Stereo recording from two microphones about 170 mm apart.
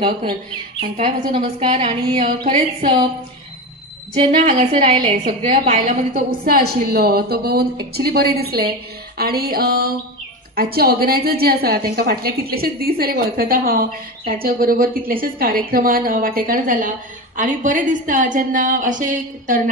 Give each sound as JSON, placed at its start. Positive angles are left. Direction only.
{"t": 0.0, "sound": "speech", "side_deg": -30}
{"t": 4.1, "sound": "a woman's voice", "side_deg": -40}
{"t": 4.7, "sound": "a woman's voice", "side_deg": -35}